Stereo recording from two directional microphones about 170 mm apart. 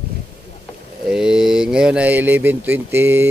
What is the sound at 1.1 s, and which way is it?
Speech, 5° right (ahead or behind).